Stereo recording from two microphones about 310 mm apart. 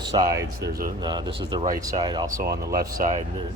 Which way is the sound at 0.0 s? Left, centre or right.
Centre.